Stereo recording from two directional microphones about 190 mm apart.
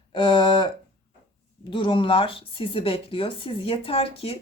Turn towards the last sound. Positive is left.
turn(degrees=30)  # may be behind; listen again after turning